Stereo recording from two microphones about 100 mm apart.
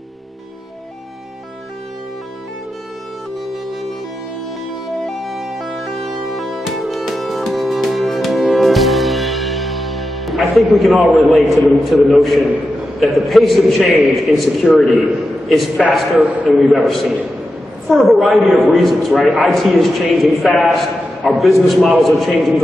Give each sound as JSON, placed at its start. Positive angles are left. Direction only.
{"t": 5.0, "sound": "music", "side_deg": 0}
{"t": 13.0, "sound": "a man's voice", "side_deg": 0}
{"t": 16.2, "sound": "a man's voice", "side_deg": -15}
{"t": 16.5, "sound": "a man's voice", "side_deg": 0}